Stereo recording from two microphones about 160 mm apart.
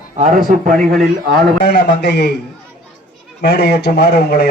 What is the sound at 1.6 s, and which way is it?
Speech, 90° left.